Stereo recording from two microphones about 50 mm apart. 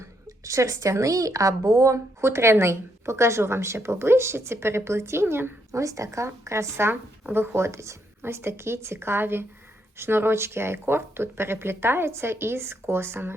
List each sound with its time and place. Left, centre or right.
0.0 s speech: right
5.7 s a woman's voice: right
8.2 s speech: right